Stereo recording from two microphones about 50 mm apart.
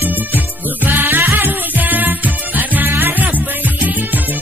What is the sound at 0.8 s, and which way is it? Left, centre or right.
Music, right.